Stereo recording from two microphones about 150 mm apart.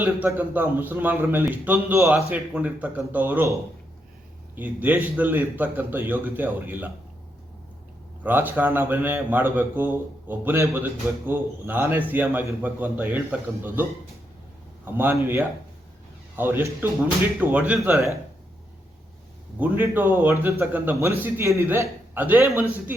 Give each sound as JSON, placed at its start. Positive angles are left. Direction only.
{"t": 0.0, "sound": "a man's voice", "side_deg": -10}
{"t": 8.2, "sound": "a man's voice", "side_deg": -15}
{"t": 14.9, "sound": "a man's voice", "side_deg": -15}
{"t": 19.5, "sound": "a man's voice", "side_deg": -10}